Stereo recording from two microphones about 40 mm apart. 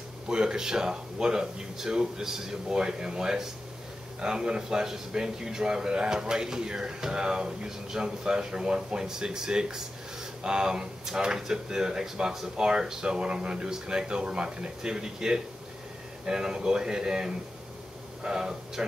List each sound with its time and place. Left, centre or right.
0.3 s speech: centre